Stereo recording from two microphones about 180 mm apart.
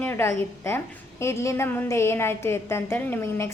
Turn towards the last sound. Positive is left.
turn(degrees=15)  # may be behind; listen again after turning